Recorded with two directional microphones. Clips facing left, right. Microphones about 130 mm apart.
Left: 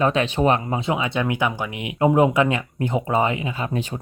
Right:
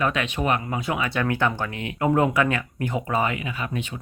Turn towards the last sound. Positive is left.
turn(degrees=25)  # may be behind; listen again after turning